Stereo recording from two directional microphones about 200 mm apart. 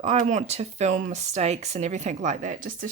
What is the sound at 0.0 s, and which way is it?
Speech, 35° right (ahead or behind).